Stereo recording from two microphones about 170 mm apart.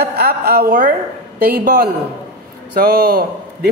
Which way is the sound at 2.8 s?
60° right (ahead or behind).